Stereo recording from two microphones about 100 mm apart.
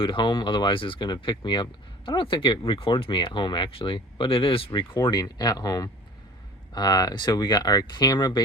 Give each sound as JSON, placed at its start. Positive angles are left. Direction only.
{"t": 0.0, "sound": "speech", "side_deg": 55}
{"t": 5.0, "sound": "speech", "side_deg": 45}